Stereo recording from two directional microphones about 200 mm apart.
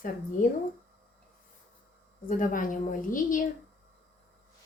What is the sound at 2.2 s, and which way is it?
A woman's voice, 40° left (ahead or behind).